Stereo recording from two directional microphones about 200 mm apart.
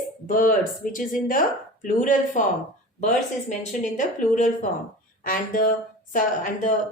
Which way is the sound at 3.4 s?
40° left (ahead or behind).